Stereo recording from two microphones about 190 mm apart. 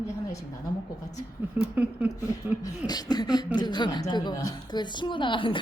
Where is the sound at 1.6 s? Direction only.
10° right (ahead or behind).